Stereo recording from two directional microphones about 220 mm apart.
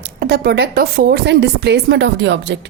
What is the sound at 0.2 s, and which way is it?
A woman's voice, 45° right (ahead or behind).